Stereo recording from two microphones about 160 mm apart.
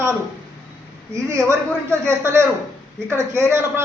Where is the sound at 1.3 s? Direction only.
15° right (ahead or behind).